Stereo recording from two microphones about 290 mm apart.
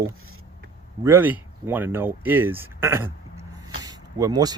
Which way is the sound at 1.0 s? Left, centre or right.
Centre.